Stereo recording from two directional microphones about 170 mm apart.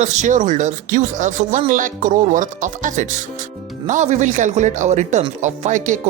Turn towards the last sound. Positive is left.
turn(degrees=-45)  # may be behind; listen again after turning